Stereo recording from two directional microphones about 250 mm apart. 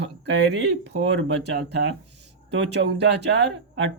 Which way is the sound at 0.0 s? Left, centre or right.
Right.